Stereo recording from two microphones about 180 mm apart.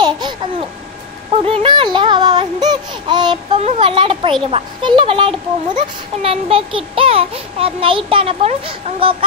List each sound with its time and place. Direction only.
0.0 s babbling: 25° right (ahead or behind)
1.4 s a sound: 30° right (ahead or behind)
3.6 s a child's voice: 30° right (ahead or behind)